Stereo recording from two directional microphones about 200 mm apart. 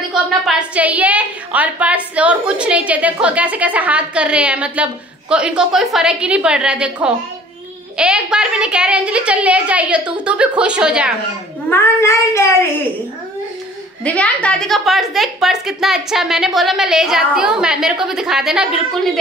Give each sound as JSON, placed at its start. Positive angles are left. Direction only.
{"t": 0.1, "sound": "a woman's voice", "side_deg": -5}
{"t": 11.7, "sound": "speech", "side_deg": 10}
{"t": 14.0, "sound": "a woman's voice", "side_deg": 5}